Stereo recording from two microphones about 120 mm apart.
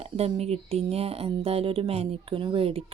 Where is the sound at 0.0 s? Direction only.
55° right (ahead or behind).